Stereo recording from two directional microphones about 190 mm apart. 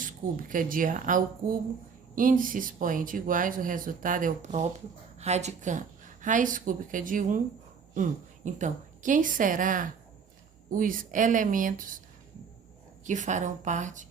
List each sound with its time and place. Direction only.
0.0 s a woman's voice: 45° right (ahead or behind)
13.1 s a woman's voice: 40° right (ahead or behind)